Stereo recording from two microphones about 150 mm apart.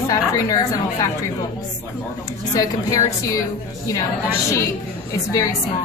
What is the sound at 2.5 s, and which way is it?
Speech, 20° left (ahead or behind).